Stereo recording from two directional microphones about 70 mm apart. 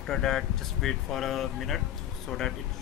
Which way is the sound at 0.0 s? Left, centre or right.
Centre.